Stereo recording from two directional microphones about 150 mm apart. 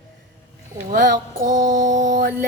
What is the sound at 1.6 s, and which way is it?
Mantra, 60° right (ahead or behind).